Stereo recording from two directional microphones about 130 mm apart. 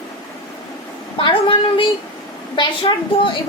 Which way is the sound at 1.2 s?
40° left (ahead or behind).